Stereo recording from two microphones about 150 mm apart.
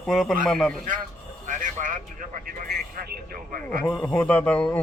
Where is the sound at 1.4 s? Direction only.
60° right (ahead or behind).